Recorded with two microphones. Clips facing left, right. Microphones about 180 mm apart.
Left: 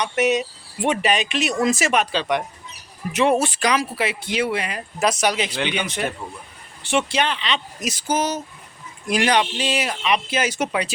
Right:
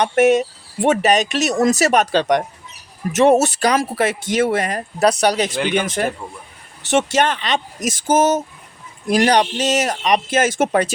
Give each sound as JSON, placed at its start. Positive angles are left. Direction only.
{"t": 0.0, "sound": "speech", "side_deg": -50}